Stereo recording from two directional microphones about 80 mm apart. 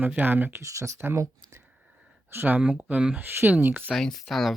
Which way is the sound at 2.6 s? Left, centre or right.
Centre.